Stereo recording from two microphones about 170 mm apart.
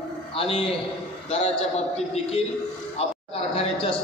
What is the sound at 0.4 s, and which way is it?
A man's voice, 35° left (ahead or behind).